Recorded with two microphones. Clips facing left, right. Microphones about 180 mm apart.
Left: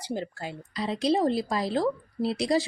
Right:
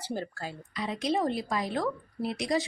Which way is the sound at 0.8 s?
35° left (ahead or behind).